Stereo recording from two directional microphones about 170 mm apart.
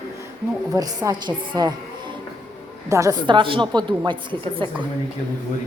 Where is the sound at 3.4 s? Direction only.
30° right (ahead or behind).